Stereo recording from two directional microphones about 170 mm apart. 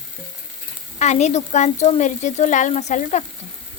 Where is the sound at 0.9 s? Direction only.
45° left (ahead or behind).